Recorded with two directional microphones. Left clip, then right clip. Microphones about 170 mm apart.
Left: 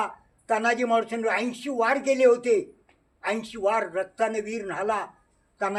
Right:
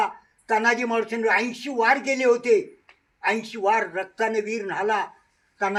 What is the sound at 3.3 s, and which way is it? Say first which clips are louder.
A man's voice: right 3 dB; 35° left (ahead or behind).